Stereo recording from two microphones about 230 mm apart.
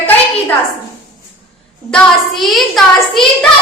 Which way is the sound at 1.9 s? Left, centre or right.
Centre.